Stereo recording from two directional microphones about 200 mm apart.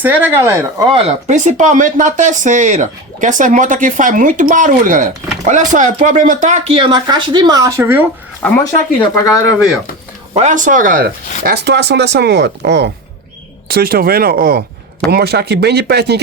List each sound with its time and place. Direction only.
0.0 s speech: 10° right (ahead or behind)
0.9 s speech: 30° right (ahead or behind); by 8.0 s 10° right (ahead or behind)
8.4 s speech: 5° left (ahead or behind)
10.3 s speech: 40° right (ahead or behind); by 16.2 s 55° right (ahead or behind)